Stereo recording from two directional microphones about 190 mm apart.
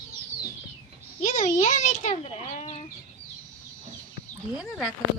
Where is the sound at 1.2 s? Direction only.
40° left (ahead or behind).